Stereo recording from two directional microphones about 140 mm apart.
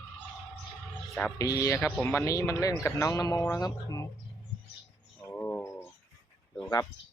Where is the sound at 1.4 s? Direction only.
25° left (ahead or behind).